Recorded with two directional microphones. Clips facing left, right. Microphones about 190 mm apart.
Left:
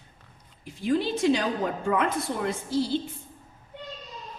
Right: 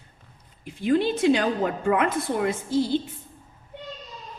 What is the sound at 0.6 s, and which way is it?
Speech, 60° right (ahead or behind).